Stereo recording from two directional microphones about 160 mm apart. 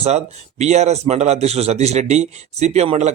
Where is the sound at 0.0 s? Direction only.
45° right (ahead or behind).